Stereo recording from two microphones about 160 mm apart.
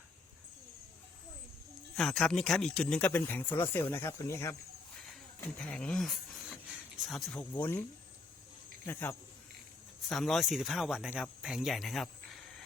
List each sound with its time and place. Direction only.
2.0 s speech: 5° left (ahead or behind); by 4.5 s 20° left (ahead or behind)
5.5 s speech: 5° left (ahead or behind)
7.3 s speech: 15° left (ahead or behind)
8.9 s speech: 15° left (ahead or behind)
10.1 s speech: centre (ahead or behind)